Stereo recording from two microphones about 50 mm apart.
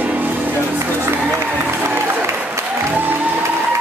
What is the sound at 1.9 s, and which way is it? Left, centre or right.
Applause, right.